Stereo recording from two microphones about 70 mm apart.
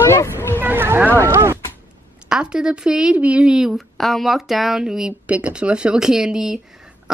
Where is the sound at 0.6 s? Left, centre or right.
Right.